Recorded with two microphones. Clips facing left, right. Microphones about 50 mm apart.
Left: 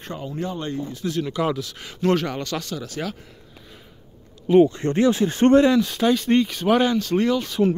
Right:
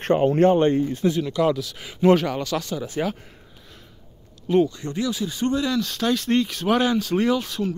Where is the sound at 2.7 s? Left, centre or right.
Right.